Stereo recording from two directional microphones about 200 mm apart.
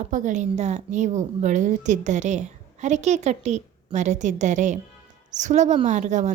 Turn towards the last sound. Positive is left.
turn(degrees=-35)  # may be behind; listen again after turning